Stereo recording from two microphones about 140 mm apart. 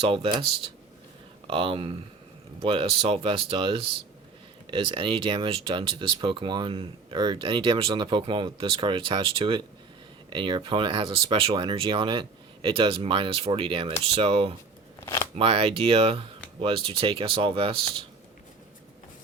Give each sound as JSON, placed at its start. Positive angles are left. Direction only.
{"t": 0.0, "sound": "speech", "side_deg": -40}
{"t": 1.5, "sound": "speech", "side_deg": -40}
{"t": 15.0, "sound": "shuffling cards", "side_deg": 20}
{"t": 15.4, "sound": "speech", "side_deg": -40}